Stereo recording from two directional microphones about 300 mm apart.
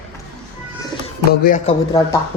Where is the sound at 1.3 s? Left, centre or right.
Left.